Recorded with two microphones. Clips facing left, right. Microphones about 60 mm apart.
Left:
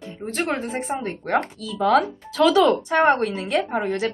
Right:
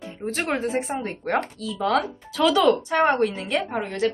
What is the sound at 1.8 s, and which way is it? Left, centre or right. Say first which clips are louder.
Speech: left 4 dB; centre.